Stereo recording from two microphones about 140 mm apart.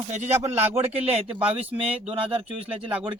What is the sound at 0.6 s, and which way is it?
Speech, 15° right (ahead or behind).